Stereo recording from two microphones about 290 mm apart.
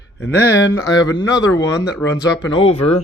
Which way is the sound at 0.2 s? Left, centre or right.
Centre.